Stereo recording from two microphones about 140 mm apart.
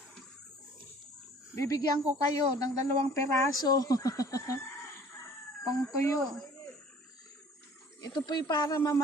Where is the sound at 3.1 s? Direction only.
20° left (ahead or behind).